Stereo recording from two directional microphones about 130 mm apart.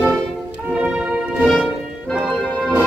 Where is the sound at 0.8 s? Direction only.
10° right (ahead or behind).